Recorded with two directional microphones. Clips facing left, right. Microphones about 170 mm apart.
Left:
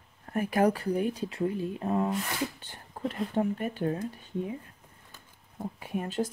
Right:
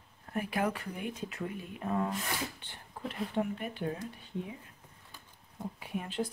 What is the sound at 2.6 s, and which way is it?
Speech, 40° left (ahead or behind).